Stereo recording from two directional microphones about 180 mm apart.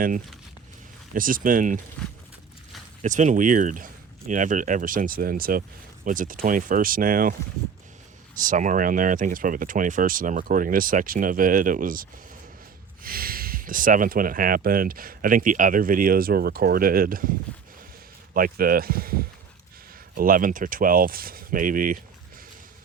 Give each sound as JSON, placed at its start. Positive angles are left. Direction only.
{"t": 1.1, "sound": "speech", "side_deg": -50}
{"t": 3.0, "sound": "speech", "side_deg": -40}
{"t": 8.4, "sound": "speech", "side_deg": -45}
{"t": 18.3, "sound": "speech", "side_deg": -55}